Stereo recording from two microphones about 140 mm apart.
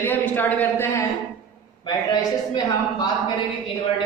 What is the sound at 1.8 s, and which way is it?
Speech, 30° left (ahead or behind).